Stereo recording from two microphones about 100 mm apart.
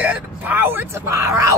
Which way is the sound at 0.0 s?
15° right (ahead or behind).